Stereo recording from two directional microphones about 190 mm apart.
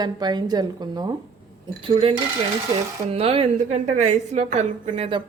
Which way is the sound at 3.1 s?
30° right (ahead or behind).